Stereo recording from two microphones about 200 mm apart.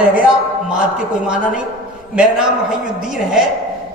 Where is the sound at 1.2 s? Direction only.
5° right (ahead or behind).